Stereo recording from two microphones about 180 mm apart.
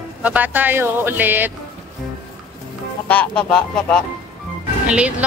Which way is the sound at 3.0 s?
5° left (ahead or behind).